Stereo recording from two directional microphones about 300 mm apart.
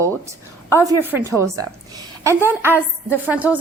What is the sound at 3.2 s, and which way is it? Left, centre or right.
Music, centre.